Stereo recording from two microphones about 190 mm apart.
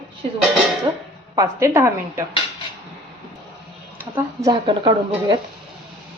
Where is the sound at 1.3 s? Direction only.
15° right (ahead or behind).